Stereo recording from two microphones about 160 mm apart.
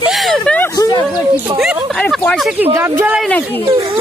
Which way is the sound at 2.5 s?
15° right (ahead or behind).